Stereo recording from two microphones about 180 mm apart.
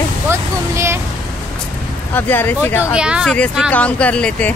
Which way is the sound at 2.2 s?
10° left (ahead or behind).